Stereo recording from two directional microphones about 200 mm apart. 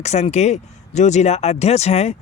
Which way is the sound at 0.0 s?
35° left (ahead or behind).